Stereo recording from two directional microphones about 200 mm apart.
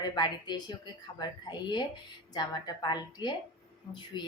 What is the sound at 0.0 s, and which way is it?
A woman's voice, 20° left (ahead or behind).